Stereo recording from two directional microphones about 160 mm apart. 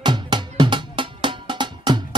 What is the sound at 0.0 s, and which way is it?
Music, 30° right (ahead or behind).